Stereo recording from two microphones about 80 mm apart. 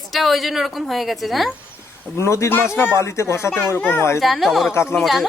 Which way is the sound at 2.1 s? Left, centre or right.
Left.